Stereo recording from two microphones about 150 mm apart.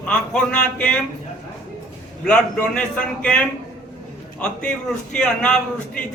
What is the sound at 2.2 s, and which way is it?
A man's voice, 5° left (ahead or behind).